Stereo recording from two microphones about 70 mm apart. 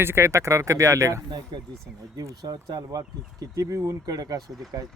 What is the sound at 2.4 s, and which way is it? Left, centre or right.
Speech, right.